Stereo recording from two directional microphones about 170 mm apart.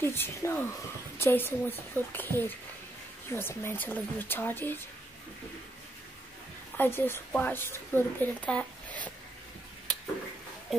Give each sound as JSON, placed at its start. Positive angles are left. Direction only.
{"t": 0.0, "sound": "a woman's voice", "side_deg": 15}
{"t": 6.8, "sound": "a woman's voice", "side_deg": 15}